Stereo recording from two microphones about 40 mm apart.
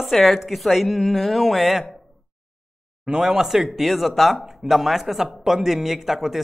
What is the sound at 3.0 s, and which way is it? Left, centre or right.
A man's voice, centre.